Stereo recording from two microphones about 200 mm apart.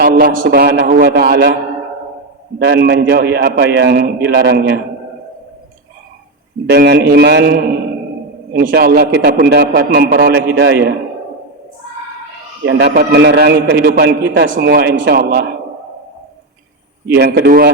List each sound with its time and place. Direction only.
0.0 s a man's voice: 45° right (ahead or behind)
2.6 s a man's voice: 55° right (ahead or behind)
6.7 s a man's voice: 55° right (ahead or behind)
12.6 s a man's voice: 60° right (ahead or behind)
17.2 s a man's voice: 55° right (ahead or behind)